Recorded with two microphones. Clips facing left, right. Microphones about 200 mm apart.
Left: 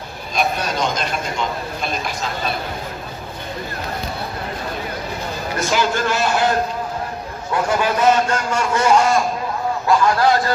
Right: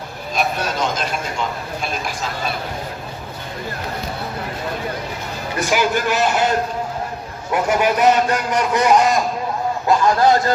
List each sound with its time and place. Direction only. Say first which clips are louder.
0.3 s a man's voice: left 1 dB; 5° right (ahead or behind)
5.5 s a man's voice: right 1 dB; 15° right (ahead or behind)
7.5 s a man's voice: right 2 dB; 20° right (ahead or behind)